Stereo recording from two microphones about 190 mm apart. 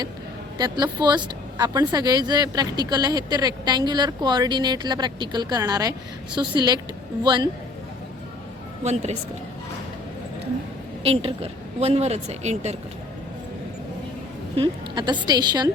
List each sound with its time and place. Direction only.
0.6 s speech: 20° right (ahead or behind)
8.8 s a woman's voice: 35° right (ahead or behind)
11.0 s a woman's voice: 30° right (ahead or behind)
14.5 s speech: 25° right (ahead or behind)